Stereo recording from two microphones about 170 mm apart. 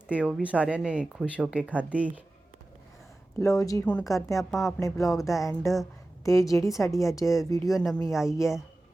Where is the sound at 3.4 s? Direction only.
20° left (ahead or behind).